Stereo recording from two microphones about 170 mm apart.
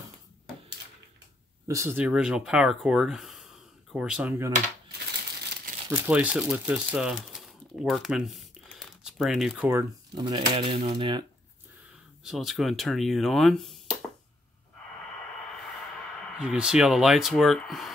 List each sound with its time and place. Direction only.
1.7 s speech: 15° right (ahead or behind)
4.9 s crumpling: 70° right (ahead or behind)
5.9 s speech: 10° right (ahead or behind)
10.1 s speech: 25° right (ahead or behind)
12.2 s speech: centre (ahead or behind)
16.2 s speech: centre (ahead or behind)